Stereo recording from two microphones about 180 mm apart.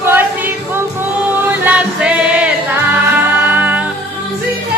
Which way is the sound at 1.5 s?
10° right (ahead or behind).